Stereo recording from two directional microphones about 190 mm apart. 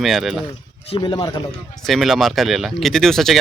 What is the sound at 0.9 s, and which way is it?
Speech, 25° left (ahead or behind).